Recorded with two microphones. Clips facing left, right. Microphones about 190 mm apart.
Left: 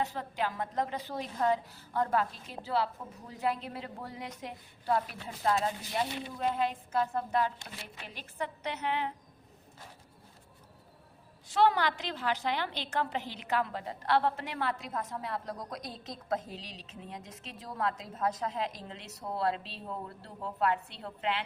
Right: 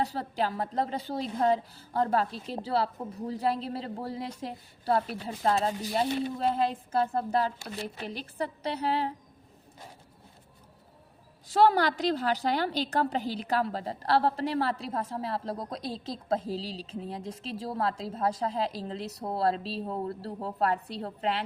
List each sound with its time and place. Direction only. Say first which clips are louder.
0.0 s a woman's voice: right 4 dB; 35° right (ahead or behind)
11.4 s a woman's voice: right 4 dB; 35° right (ahead or behind)